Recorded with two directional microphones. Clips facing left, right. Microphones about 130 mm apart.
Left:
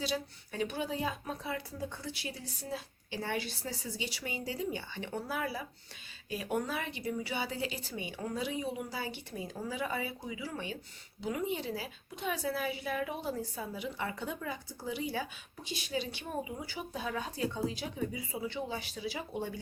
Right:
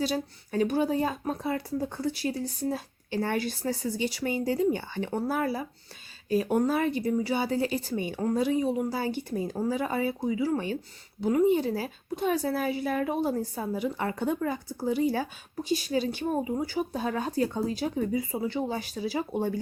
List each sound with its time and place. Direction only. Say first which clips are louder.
0.0 s speech: right 7 dB; 45° right (ahead or behind)